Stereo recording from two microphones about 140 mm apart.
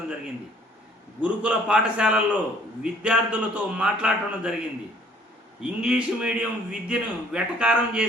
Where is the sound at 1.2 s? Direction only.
5° right (ahead or behind).